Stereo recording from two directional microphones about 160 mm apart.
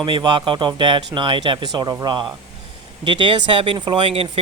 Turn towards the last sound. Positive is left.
turn(degrees=-35)  # may be behind; listen again after turning